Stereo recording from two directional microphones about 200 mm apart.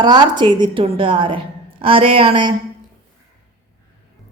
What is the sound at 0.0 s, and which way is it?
A woman's voice, 20° right (ahead or behind).